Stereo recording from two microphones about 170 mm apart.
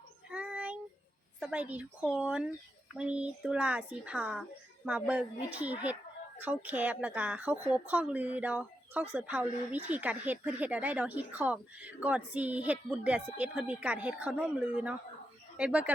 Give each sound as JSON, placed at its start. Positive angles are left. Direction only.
{"t": 0.3, "sound": "child singing", "side_deg": -5}
{"t": 1.4, "sound": "speech", "side_deg": -5}